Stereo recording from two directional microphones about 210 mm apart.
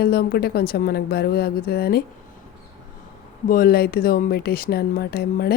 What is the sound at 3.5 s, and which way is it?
Speech, 45° left (ahead or behind).